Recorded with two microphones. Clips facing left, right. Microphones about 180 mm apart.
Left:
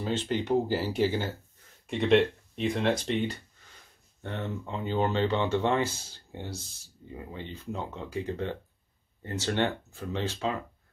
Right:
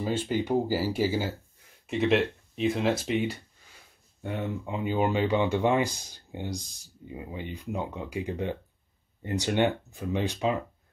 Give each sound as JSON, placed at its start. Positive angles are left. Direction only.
{"t": 0.0, "sound": "speech", "side_deg": -10}